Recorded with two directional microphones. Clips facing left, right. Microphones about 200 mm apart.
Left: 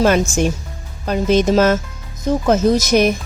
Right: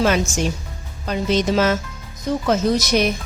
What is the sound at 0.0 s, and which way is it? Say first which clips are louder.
Speech: left 4 dB; 50° left (ahead or behind).